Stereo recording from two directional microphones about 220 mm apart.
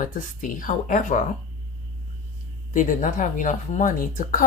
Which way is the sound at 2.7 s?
35° left (ahead or behind).